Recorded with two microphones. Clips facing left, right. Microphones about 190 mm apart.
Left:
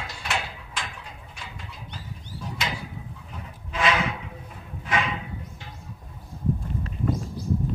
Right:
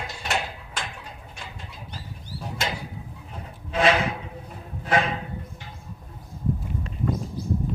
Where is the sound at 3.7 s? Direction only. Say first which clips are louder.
Right 4 dB; 30° right (ahead or behind).